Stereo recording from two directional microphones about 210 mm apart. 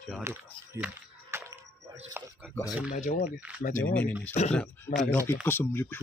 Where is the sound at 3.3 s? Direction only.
5° right (ahead or behind).